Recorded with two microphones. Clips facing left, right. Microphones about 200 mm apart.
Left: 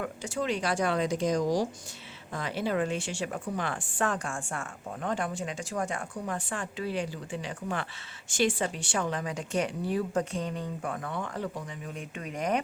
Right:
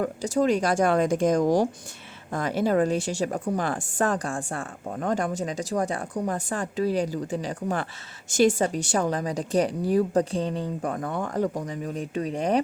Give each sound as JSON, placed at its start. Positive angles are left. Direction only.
{"t": 0.0, "sound": "a woman's voice", "side_deg": -40}